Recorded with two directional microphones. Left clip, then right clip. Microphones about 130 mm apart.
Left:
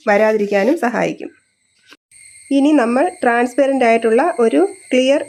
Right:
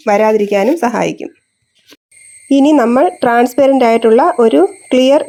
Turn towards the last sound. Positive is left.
turn(degrees=-25)  # may be behind; listen again after turning